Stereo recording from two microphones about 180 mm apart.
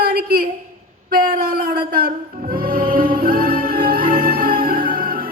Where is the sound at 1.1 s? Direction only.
55° right (ahead or behind).